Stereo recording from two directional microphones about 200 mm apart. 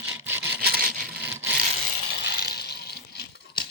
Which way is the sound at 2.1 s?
55° left (ahead or behind).